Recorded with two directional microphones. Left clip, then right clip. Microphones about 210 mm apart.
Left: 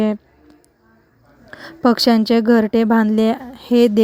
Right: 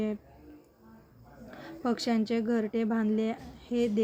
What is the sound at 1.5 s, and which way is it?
A woman's voice, 55° left (ahead or behind).